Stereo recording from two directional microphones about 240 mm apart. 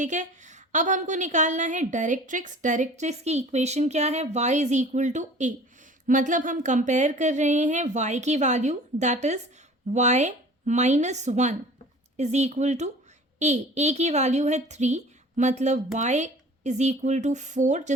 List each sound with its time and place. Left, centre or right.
0.0 s a woman's voice: right